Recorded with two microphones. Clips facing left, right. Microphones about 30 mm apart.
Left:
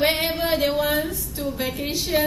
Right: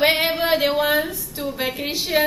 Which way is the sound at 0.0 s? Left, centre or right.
Centre.